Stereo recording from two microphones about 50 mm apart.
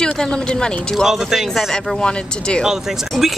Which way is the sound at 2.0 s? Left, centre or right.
Centre.